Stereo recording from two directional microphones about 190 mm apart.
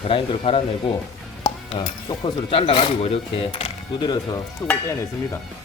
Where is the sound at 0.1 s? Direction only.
30° left (ahead or behind).